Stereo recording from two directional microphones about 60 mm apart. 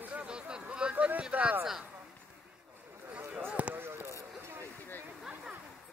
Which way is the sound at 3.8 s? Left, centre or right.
Right.